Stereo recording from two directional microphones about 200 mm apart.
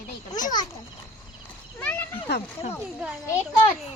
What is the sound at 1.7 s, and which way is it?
Speech, 10° left (ahead or behind).